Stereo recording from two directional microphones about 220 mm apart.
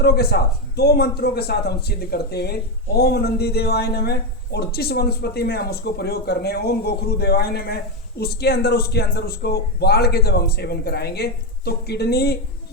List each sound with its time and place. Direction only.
0.0 s speech: 45° left (ahead or behind)